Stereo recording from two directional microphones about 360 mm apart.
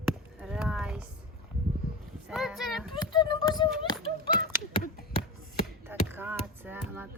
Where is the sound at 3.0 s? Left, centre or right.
Centre.